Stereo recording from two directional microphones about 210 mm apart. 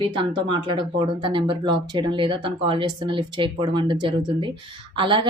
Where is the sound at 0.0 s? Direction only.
25° right (ahead or behind).